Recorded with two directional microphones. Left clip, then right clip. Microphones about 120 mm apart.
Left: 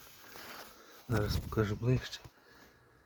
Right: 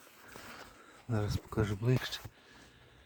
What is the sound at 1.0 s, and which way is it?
Speech, 10° left (ahead or behind).